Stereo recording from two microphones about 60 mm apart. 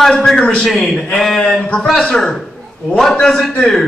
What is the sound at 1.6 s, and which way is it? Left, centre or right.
Speech, centre.